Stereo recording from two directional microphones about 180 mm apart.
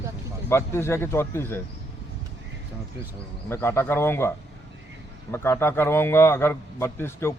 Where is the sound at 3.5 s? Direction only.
15° left (ahead or behind).